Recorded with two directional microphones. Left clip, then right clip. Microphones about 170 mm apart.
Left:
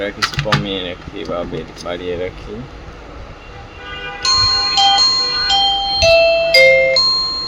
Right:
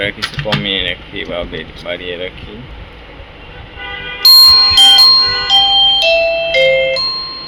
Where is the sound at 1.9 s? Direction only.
15° left (ahead or behind).